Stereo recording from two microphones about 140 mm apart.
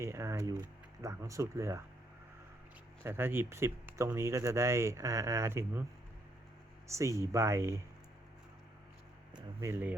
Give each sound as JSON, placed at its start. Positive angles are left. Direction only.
{"t": 0.0, "sound": "speech", "side_deg": -20}
{"t": 3.0, "sound": "speech", "side_deg": -15}
{"t": 6.8, "sound": "speech", "side_deg": -20}
{"t": 9.6, "sound": "speech", "side_deg": -20}